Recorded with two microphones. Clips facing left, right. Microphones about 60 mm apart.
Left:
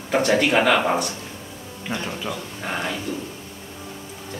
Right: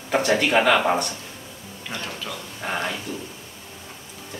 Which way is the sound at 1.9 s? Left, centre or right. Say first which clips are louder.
Left 4 dB; centre.